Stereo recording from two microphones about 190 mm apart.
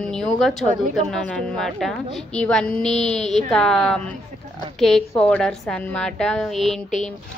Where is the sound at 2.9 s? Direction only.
35° left (ahead or behind).